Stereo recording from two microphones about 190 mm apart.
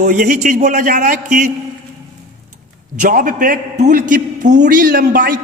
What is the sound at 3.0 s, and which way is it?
A man's voice, 45° right (ahead or behind).